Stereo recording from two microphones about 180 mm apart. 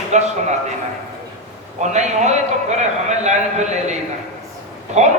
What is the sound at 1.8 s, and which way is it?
A man's voice, 40° right (ahead or behind).